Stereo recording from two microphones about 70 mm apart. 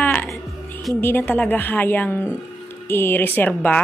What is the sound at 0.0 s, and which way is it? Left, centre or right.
Music, left.